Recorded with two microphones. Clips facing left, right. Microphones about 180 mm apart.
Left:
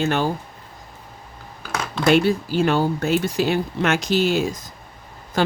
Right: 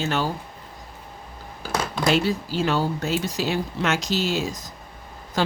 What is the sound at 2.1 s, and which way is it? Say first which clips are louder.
Speech: left 6 dB; 55° left (ahead or behind).